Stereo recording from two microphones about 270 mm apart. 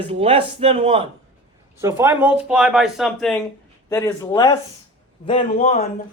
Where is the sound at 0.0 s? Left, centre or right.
Right.